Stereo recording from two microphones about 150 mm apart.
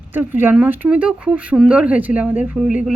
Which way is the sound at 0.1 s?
15° right (ahead or behind).